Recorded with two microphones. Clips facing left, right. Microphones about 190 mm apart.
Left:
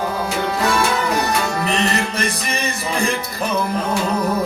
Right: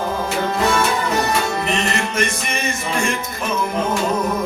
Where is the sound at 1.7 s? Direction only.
35° left (ahead or behind).